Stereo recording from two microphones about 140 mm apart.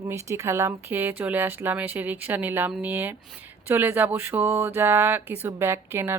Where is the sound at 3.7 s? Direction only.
15° right (ahead or behind).